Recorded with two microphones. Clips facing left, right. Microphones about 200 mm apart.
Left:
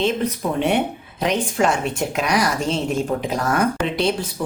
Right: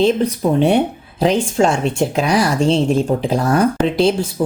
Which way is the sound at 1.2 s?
30° right (ahead or behind).